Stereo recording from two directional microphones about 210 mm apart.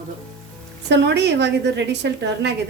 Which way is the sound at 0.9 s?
55° right (ahead or behind).